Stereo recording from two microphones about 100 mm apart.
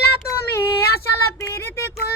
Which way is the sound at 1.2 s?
25° left (ahead or behind).